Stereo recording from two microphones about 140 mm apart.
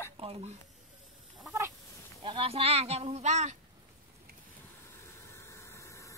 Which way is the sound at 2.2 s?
40° right (ahead or behind).